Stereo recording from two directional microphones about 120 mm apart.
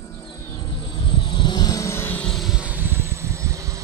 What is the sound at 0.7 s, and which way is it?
Vehicle, 40° left (ahead or behind).